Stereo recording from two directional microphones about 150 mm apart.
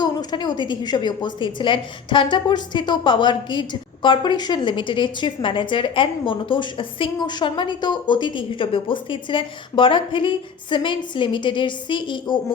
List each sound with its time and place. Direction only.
0.0 s a woman's voice: 30° left (ahead or behind)